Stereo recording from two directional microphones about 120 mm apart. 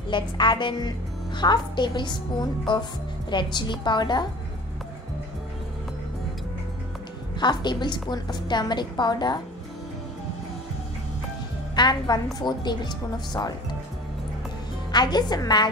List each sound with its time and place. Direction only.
0.1 s a woman's voice: 40° left (ahead or behind)
7.3 s a woman's voice: 40° left (ahead or behind)
11.7 s a woman's voice: 35° left (ahead or behind)
14.9 s a woman's voice: 35° left (ahead or behind)